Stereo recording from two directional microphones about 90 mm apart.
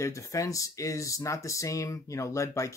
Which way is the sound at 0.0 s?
35° left (ahead or behind).